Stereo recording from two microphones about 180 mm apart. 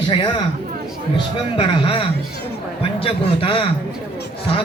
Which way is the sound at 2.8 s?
30° left (ahead or behind).